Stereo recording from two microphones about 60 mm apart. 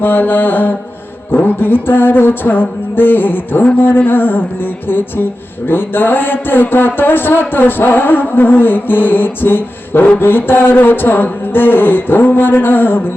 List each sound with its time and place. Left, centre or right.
0.0 s a man's voice: left